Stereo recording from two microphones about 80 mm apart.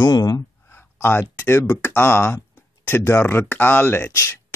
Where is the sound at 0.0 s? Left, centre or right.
Left.